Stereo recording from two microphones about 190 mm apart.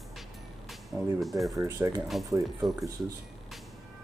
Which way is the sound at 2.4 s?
Centre (ahead or behind).